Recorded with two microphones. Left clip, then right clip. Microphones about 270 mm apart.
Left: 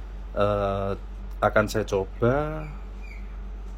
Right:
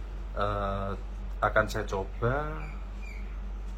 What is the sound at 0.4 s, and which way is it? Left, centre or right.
Speech, left.